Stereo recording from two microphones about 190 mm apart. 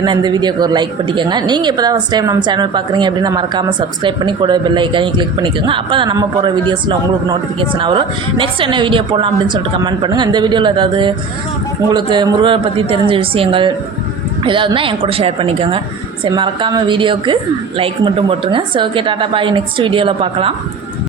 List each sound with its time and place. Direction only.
0.0 s a woman's voice: 25° right (ahead or behind)